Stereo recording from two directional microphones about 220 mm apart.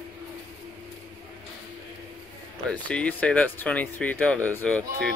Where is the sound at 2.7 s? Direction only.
5° left (ahead or behind).